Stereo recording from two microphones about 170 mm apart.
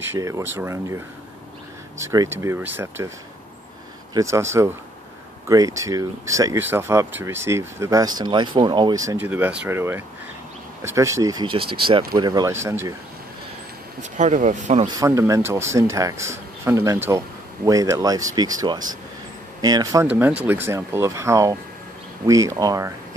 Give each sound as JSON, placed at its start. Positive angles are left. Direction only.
{"t": 0.0, "sound": "speech", "side_deg": -15}
{"t": 4.1, "sound": "speech", "side_deg": -20}
{"t": 14.1, "sound": "speech", "side_deg": -45}
{"t": 15.0, "sound": "speech", "side_deg": -20}